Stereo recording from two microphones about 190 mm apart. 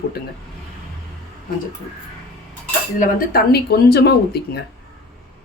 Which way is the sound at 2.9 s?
45° left (ahead or behind).